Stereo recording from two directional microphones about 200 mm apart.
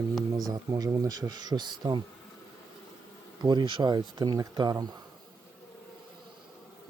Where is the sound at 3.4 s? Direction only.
25° right (ahead or behind).